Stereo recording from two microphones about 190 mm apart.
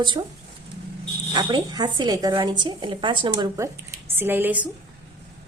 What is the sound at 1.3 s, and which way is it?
A woman's voice, 20° right (ahead or behind).